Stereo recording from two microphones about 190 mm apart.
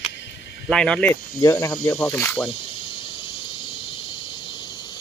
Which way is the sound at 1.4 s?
20° left (ahead or behind).